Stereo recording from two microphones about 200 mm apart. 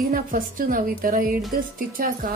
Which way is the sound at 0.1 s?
45° right (ahead or behind).